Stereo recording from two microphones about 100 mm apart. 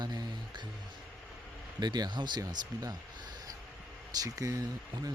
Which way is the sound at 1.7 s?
45° right (ahead or behind).